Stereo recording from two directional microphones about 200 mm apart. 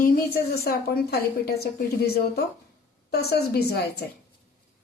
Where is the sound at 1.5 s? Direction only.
50° left (ahead or behind).